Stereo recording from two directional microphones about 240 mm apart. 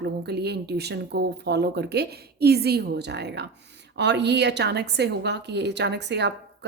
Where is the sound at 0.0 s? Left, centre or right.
Right.